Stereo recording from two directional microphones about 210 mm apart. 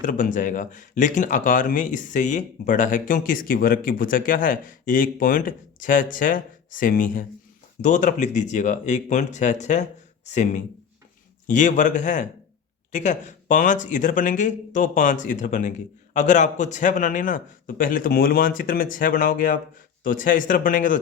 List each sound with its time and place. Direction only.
0.0 s speech: 40° left (ahead or behind)